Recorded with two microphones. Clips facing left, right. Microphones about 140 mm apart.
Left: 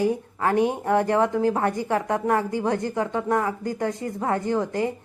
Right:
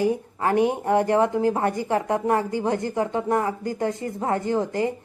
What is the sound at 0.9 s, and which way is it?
Speech, 20° right (ahead or behind).